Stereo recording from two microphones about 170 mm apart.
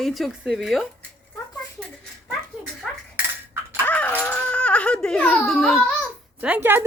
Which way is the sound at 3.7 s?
10° left (ahead or behind).